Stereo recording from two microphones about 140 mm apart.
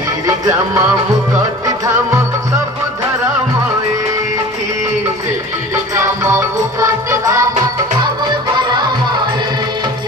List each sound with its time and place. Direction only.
5.9 s music: 20° right (ahead or behind)
8.5 s music: 30° right (ahead or behind)